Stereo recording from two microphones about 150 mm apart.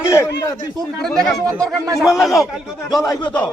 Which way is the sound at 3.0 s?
25° left (ahead or behind).